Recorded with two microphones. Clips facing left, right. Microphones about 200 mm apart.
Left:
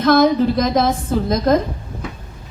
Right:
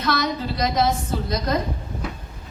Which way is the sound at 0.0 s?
50° left (ahead or behind).